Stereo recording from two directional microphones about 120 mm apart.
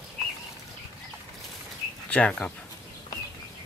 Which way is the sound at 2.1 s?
10° left (ahead or behind).